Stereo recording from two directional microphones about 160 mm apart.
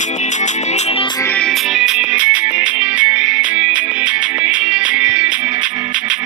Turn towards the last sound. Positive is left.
turn(degrees=-5)  # may be behind; listen again after turning